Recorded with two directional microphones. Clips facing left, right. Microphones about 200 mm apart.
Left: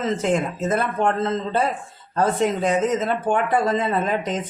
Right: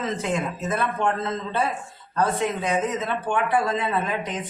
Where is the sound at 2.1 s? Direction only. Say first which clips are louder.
Left 3 dB; 45° left (ahead or behind).